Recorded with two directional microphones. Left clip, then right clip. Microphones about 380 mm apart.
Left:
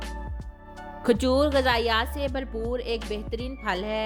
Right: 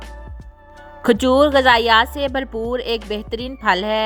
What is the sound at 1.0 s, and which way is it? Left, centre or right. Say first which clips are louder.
A woman's voice: right 8 dB; centre.